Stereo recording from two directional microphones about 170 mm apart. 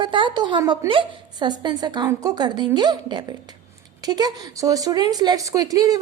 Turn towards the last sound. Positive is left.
turn(degrees=-20)  # may be behind; listen again after turning